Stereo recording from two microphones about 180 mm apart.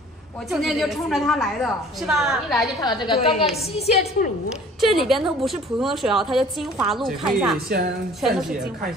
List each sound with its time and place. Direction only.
0.5 s a woman's voice: centre (ahead or behind)
2.8 s a woman's voice: 25° left (ahead or behind)
4.7 s a woman's voice: centre (ahead or behind)